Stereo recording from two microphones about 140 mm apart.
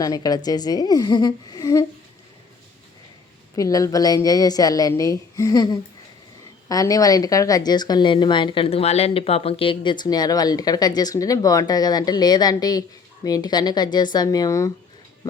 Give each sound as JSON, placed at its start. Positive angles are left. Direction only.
{"t": 0.0, "sound": "a woman's voice", "side_deg": 25}
{"t": 3.5, "sound": "a woman's voice", "side_deg": 25}